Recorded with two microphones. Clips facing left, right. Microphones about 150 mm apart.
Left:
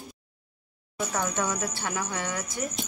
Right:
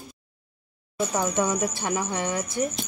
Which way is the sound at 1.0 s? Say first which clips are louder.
Right 4 dB; 20° right (ahead or behind).